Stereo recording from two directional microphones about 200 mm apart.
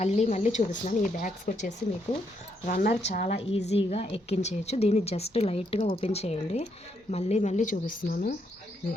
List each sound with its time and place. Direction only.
0.0 s a woman's voice: 35° left (ahead or behind)
3.1 s a woman's voice: 30° left (ahead or behind)